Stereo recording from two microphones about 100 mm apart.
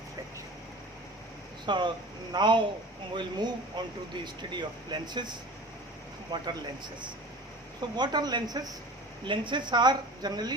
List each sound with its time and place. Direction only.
1.6 s speech: 50° right (ahead or behind)
6.3 s speech: 45° right (ahead or behind)
7.9 s speech: 45° right (ahead or behind)
9.2 s speech: 55° right (ahead or behind)